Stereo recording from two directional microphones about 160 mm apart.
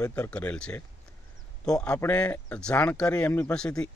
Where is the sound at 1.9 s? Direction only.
10° left (ahead or behind).